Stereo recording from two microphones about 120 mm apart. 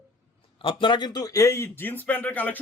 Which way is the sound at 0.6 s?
45° left (ahead or behind).